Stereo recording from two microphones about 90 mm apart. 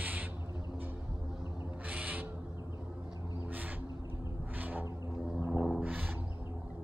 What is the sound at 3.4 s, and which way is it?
Crow, 20° right (ahead or behind).